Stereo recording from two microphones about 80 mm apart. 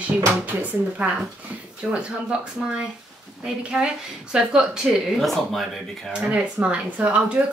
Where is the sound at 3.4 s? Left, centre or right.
Centre.